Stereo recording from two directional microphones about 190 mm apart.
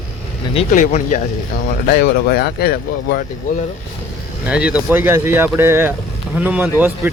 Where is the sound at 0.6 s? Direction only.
40° left (ahead or behind).